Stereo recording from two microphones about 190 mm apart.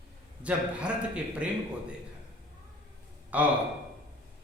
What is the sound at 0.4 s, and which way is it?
A man's voice, 5° right (ahead or behind).